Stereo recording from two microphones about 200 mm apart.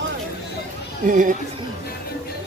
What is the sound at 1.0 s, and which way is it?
Speech, 40° right (ahead or behind).